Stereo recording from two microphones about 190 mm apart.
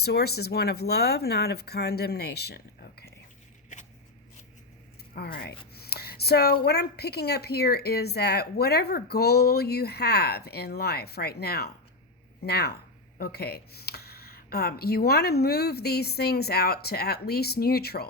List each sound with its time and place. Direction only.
0.0 s speech: 55° left (ahead or behind)
3.7 s a sound: 40° left (ahead or behind)
5.1 s speech: 55° left (ahead or behind)